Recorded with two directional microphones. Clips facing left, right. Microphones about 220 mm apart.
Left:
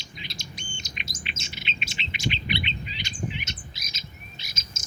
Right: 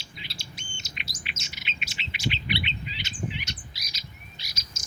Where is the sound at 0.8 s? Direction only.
20° left (ahead or behind).